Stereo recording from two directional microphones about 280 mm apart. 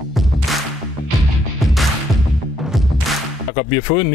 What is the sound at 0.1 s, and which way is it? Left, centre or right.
Music, centre.